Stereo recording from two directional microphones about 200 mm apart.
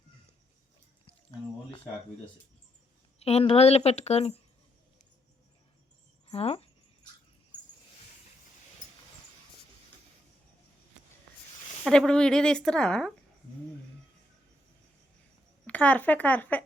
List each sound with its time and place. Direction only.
3.2 s a woman's voice: 30° left (ahead or behind)
6.2 s speech: 30° left (ahead or behind)
11.9 s speech: 5° left (ahead or behind)
15.6 s speech: 5° left (ahead or behind)